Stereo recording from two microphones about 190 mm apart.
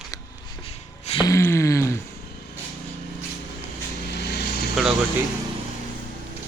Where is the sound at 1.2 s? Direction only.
15° left (ahead or behind).